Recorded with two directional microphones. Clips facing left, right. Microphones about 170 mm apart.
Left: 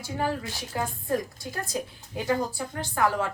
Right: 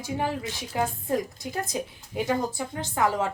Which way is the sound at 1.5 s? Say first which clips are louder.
Right 1 dB; 20° right (ahead or behind).